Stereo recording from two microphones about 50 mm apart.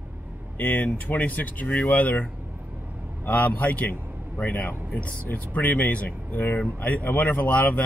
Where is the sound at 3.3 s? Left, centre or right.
Left.